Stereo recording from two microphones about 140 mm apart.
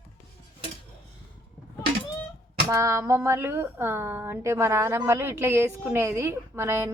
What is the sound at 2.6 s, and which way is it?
A woman's voice, 20° right (ahead or behind).